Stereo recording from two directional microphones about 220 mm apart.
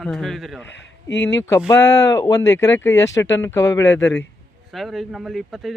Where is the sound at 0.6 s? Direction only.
55° left (ahead or behind).